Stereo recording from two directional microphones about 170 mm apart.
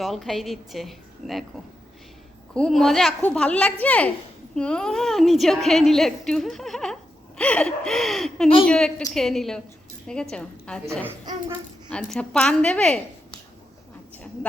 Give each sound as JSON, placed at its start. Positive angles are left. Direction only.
{"t": 0.0, "sound": "a woman's voice", "side_deg": 0}
{"t": 2.5, "sound": "a woman's voice", "side_deg": 5}
{"t": 11.9, "sound": "a woman's voice", "side_deg": 5}